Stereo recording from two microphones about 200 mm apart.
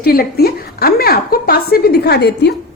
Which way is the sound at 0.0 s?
50° left (ahead or behind).